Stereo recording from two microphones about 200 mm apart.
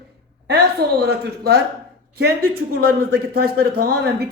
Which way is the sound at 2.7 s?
50° right (ahead or behind).